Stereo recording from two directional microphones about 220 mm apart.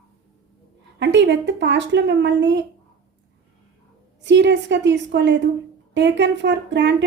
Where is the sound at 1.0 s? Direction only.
55° right (ahead or behind).